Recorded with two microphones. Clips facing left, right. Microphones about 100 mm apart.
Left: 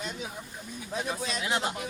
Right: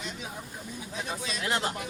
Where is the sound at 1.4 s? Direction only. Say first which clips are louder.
Right 1 dB; 5° left (ahead or behind).